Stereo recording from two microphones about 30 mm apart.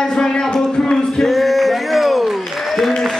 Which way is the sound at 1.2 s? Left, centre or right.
Centre.